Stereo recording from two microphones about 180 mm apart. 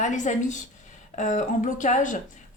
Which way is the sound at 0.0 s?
45° left (ahead or behind).